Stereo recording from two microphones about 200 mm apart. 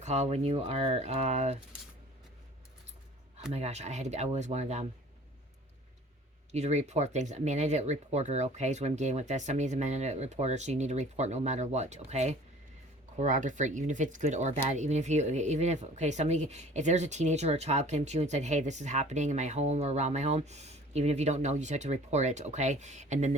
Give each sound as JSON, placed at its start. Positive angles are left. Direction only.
{"t": 0.0, "sound": "speech", "side_deg": -35}
{"t": 3.5, "sound": "speech", "side_deg": -35}
{"t": 6.5, "sound": "speech", "side_deg": -35}